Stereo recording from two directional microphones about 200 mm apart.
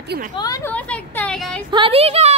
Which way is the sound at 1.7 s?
25° right (ahead or behind).